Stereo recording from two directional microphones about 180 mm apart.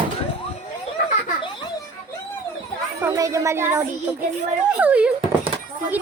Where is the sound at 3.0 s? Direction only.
20° right (ahead or behind).